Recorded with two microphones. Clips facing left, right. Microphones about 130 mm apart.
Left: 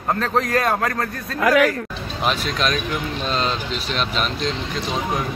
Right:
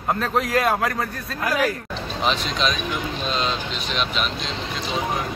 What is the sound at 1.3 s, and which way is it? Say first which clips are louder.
Speech: left 6 dB; 90° left.